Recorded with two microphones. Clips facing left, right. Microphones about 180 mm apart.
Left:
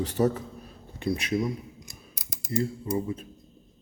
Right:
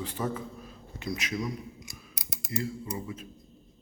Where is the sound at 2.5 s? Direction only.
35° left (ahead or behind).